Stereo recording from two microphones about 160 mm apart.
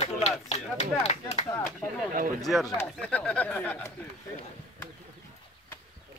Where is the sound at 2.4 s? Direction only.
Centre (ahead or behind).